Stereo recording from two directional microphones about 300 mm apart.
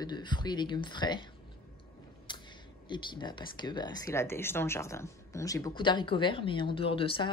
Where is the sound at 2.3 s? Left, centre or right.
Centre.